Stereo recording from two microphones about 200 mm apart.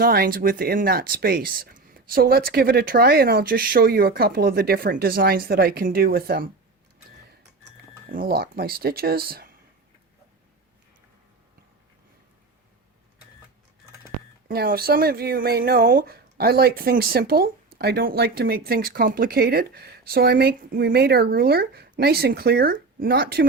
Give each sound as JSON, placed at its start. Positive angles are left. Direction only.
{"t": 0.0, "sound": "speech", "side_deg": -50}
{"t": 8.1, "sound": "speech", "side_deg": -50}
{"t": 14.4, "sound": "speech", "side_deg": -50}